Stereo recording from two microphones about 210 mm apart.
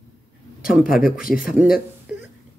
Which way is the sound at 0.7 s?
5° right (ahead or behind).